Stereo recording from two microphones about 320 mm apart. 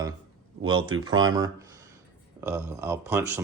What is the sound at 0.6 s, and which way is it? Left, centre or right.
Speech, right.